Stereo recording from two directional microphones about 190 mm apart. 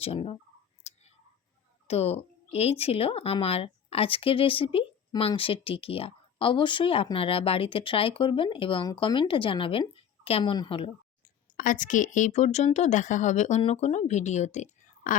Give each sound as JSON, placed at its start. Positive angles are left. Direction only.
{"t": 0.0, "sound": "a woman's voice", "side_deg": 30}
{"t": 0.9, "sound": "whispering", "side_deg": 35}
{"t": 1.9, "sound": "speech", "side_deg": 35}
{"t": 11.2, "sound": "a woman's voice", "side_deg": 45}